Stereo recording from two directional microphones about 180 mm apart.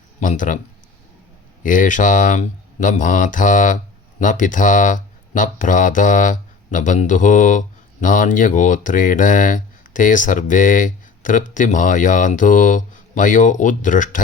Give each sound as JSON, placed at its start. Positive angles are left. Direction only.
{"t": 0.2, "sound": "speech", "side_deg": 45}
{"t": 1.6, "sound": "speech", "side_deg": 45}